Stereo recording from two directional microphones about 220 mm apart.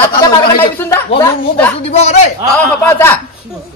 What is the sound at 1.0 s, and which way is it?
A woman's voice, 25° left (ahead or behind).